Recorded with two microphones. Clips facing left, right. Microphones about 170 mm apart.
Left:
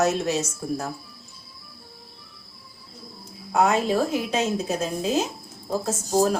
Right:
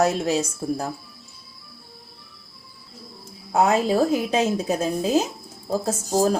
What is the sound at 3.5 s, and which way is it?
A woman's voice, 35° right (ahead or behind).